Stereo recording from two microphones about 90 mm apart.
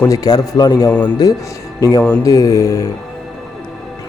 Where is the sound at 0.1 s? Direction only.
40° left (ahead or behind).